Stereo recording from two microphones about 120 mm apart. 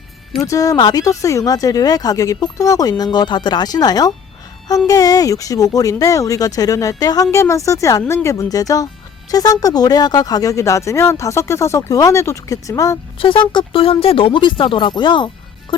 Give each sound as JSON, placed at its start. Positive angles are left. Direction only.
{"t": 0.3, "sound": "speech", "side_deg": 30}
{"t": 13.1, "sound": "speech", "side_deg": 45}